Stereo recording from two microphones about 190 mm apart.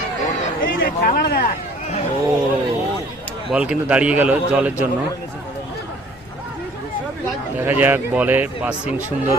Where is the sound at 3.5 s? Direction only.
5° right (ahead or behind).